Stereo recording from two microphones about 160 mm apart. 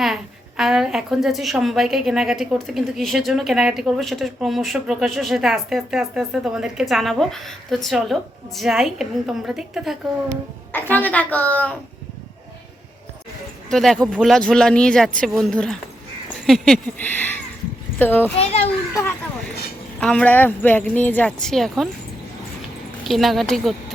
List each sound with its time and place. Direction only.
0.0 s a woman's voice: centre (ahead or behind)
10.9 s speech: 10° left (ahead or behind)
13.7 s a woman's voice: centre (ahead or behind)
18.3 s a child's voice: 40° left (ahead or behind)
20.0 s speech: 5° left (ahead or behind)
23.0 s a woman's voice: centre (ahead or behind)